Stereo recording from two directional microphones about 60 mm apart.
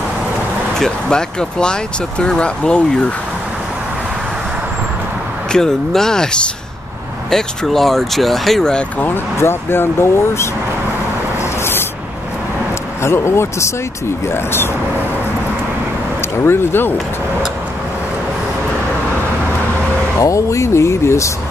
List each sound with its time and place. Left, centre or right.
0.7 s speech: centre
5.5 s speech: centre
9.0 s speech: left
13.0 s speech: left
16.2 s speech: left
20.2 s speech: left